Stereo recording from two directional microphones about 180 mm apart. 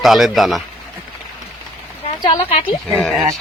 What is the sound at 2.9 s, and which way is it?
Speech, centre (ahead or behind).